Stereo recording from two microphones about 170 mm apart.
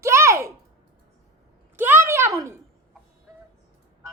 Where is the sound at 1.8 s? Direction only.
10° right (ahead or behind).